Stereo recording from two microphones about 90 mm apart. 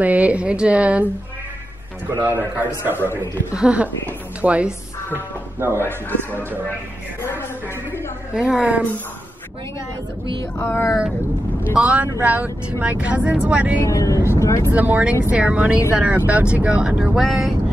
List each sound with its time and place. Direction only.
0.0 s speech: 15° right (ahead or behind)
2.0 s a man's voice: 20° right (ahead or behind)
8.3 s speech: 10° right (ahead or behind)
10.6 s speech: 30° left (ahead or behind)
11.7 s speech: 15° right (ahead or behind)
13.8 s speech: 35° left (ahead or behind)
14.7 s speech: 20° right (ahead or behind)